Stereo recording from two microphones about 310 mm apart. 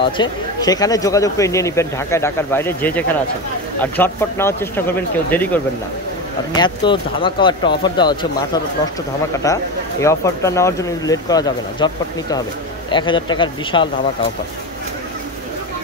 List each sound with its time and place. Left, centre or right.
0.0 s speech: centre
9.4 s speech: centre